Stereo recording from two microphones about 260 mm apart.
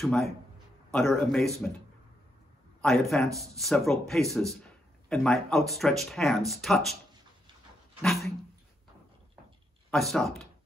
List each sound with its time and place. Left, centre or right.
0.0 s speech: centre
2.8 s speech: centre
8.0 s speech: centre
9.8 s speech: centre